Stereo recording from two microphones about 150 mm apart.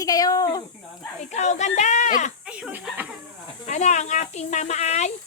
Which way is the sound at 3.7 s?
50° left (ahead or behind).